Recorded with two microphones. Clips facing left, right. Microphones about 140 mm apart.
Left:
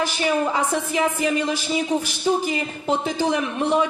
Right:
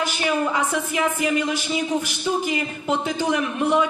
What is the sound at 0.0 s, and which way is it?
A man's voice, 35° left (ahead or behind).